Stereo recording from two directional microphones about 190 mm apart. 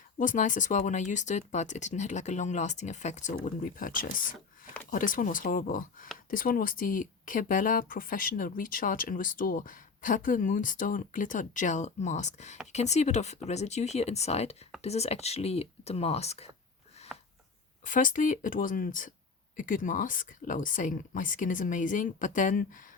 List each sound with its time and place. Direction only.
0.2 s speech: 40° left (ahead or behind)
17.1 s a sound: 5° right (ahead or behind)
17.8 s speech: 45° left (ahead or behind)